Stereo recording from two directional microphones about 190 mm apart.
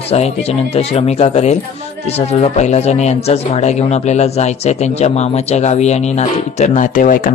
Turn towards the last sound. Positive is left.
turn(degrees=45)  # may be behind; listen again after turning